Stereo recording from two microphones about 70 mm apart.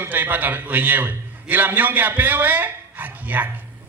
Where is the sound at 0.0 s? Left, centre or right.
Right.